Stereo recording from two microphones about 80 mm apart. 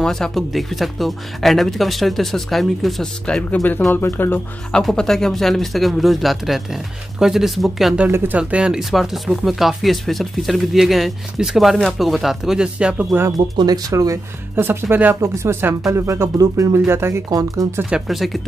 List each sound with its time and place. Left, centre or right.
0.0 s speech: centre
3.9 s speech: left
4.8 s speech: centre
8.4 s speech: centre
13.7 s speech: right
14.5 s speech: right
15.2 s speech: right
17.3 s speech: right
17.8 s speech: centre